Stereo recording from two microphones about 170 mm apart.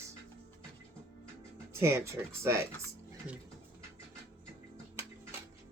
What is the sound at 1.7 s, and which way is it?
Speech, 15° right (ahead or behind).